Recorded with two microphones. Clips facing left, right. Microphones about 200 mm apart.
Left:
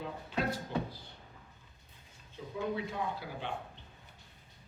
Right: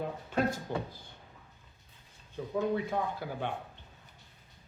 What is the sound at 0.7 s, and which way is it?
Speech, 50° right (ahead or behind).